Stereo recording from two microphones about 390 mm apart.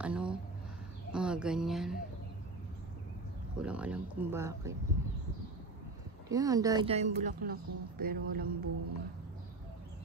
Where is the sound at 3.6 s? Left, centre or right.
Centre.